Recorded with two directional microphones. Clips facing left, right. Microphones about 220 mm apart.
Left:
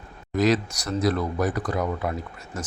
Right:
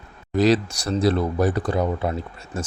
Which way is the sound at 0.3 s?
30° right (ahead or behind).